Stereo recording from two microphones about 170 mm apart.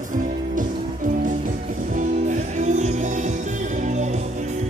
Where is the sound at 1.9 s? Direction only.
45° right (ahead or behind).